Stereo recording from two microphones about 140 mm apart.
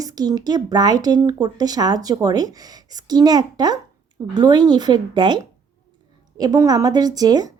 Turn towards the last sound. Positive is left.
turn(degrees=-30)  # may be behind; listen again after turning